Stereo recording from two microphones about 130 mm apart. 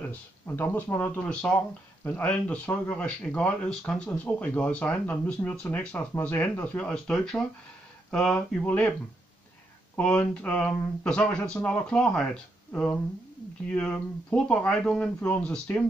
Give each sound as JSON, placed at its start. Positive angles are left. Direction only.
{"t": 0.1, "sound": "speech", "side_deg": 15}
{"t": 9.9, "sound": "speech", "side_deg": 10}